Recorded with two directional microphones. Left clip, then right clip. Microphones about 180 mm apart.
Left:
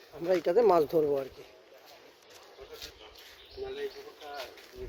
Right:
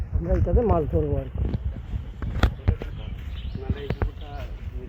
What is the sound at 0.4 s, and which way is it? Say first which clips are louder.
Speech: even; 30° left (ahead or behind).